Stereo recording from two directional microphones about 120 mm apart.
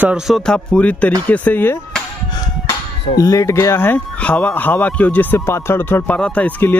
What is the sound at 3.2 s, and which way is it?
Speech, 25° left (ahead or behind).